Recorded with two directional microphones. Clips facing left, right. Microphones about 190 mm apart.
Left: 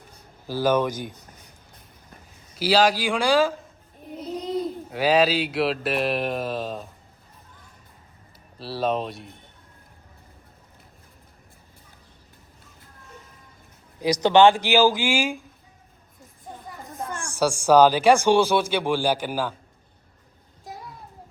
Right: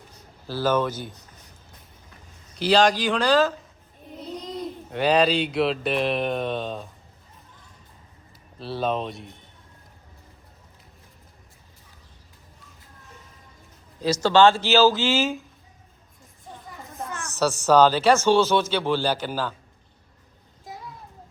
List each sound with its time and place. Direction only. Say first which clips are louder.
0.4 s speech: left 1 dB; 10° left (ahead or behind)
2.6 s speech: right 1 dB; 5° left (ahead or behind)
8.5 s speech: left 1 dB; centre (ahead or behind)
14.0 s speech: left 1 dB; 15° left (ahead or behind)
17.2 s speech: even; 10° left (ahead or behind)